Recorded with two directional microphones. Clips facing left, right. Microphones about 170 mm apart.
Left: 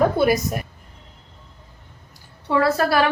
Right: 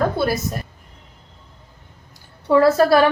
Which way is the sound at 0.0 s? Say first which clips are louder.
Left 2 dB; 15° left (ahead or behind).